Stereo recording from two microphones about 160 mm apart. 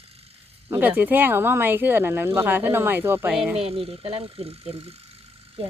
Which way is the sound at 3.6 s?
35° right (ahead or behind).